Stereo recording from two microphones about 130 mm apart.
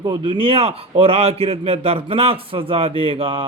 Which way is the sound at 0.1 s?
40° right (ahead or behind).